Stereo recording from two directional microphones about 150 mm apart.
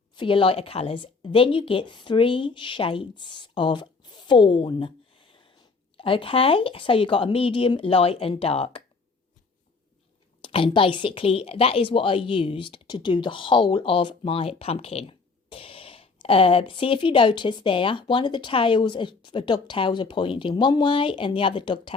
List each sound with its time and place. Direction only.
0.2 s a woman's voice: 35° left (ahead or behind)
10.4 s a woman's voice: 35° left (ahead or behind)